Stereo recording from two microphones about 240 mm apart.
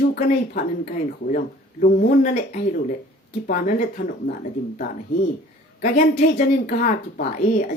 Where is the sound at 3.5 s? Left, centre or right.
Left.